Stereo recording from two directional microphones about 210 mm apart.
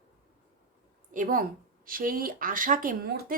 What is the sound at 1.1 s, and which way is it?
A woman's voice, 40° right (ahead or behind).